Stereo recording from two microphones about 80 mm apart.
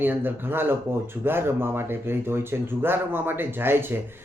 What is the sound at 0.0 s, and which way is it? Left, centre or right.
A man's voice, right.